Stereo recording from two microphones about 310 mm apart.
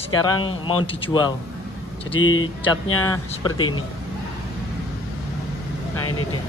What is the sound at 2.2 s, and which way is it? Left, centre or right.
Speech, left.